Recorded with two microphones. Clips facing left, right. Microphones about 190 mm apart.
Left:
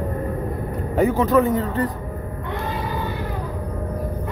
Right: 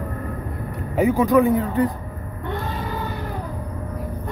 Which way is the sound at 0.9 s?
10° right (ahead or behind).